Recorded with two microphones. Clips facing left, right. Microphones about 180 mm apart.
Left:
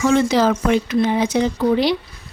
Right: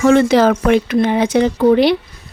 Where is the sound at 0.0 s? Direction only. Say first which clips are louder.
Right 5 dB; 60° right (ahead or behind).